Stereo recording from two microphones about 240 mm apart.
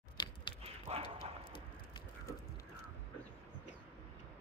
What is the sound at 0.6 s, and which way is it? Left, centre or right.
Dog, right.